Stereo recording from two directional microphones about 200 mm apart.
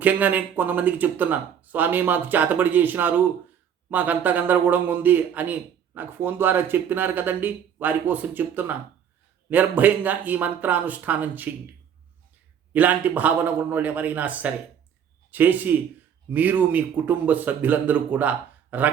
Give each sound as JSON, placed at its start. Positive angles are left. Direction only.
{"t": 0.0, "sound": "a man's voice", "side_deg": -10}
{"t": 12.7, "sound": "a man's voice", "side_deg": -10}